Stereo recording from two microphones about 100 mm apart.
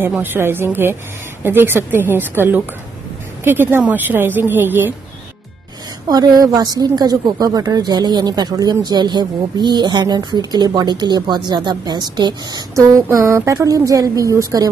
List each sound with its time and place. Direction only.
0.2 s a woman's voice: 20° right (ahead or behind)
6.0 s a woman's voice: 40° right (ahead or behind)
12.7 s a woman's voice: 30° right (ahead or behind)